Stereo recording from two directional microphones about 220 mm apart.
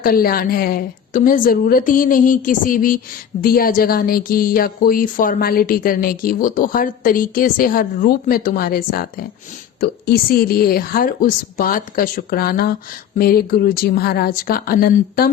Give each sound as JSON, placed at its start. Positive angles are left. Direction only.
{"t": 0.0, "sound": "a woman's voice", "side_deg": 40}